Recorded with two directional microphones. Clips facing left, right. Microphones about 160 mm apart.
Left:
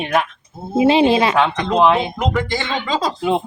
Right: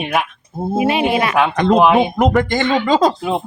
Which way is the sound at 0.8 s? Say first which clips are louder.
Left 4 dB; 25° left (ahead or behind).